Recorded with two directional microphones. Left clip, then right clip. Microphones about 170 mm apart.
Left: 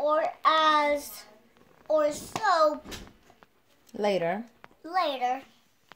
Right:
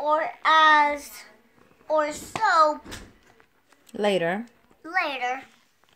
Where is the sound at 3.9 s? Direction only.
40° right (ahead or behind).